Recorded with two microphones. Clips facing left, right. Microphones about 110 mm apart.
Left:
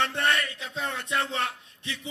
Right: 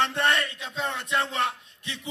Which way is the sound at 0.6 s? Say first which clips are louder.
Right 2 dB; 25° right (ahead or behind).